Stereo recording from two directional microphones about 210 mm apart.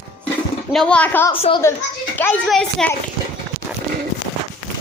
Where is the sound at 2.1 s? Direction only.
5° left (ahead or behind).